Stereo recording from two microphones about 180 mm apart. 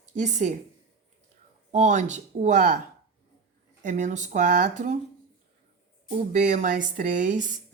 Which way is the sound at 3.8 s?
45° right (ahead or behind).